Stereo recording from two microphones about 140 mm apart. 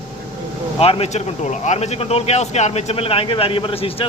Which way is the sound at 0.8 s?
45° left (ahead or behind).